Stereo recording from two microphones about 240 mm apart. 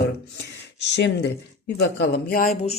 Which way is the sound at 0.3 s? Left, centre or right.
Left.